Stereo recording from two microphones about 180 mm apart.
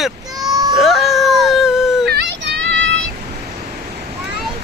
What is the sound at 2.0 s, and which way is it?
Child singing, 70° right (ahead or behind).